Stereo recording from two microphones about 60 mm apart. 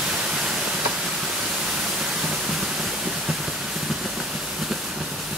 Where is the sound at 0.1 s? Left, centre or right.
Centre.